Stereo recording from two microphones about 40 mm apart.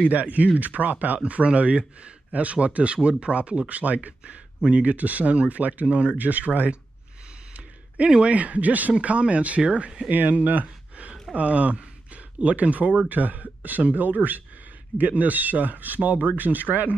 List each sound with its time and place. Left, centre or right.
0.1 s speech: right
4.6 s speech: right
4.9 s speech: right
5.9 s speech: right
6.1 s speech: right
8.1 s speech: right